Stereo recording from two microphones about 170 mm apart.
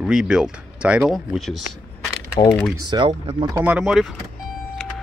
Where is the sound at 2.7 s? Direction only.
25° right (ahead or behind).